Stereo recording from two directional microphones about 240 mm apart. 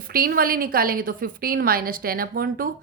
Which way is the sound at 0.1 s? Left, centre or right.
Right.